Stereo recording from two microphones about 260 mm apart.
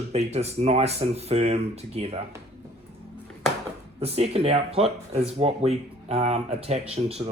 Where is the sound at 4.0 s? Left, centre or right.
Right.